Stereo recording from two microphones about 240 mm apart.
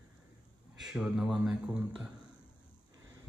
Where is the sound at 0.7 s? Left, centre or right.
Centre.